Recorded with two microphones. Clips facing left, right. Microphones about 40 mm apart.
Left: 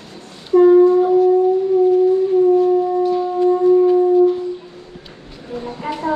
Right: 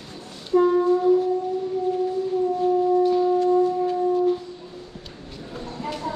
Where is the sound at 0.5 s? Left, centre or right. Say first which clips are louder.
Left 8 dB; centre.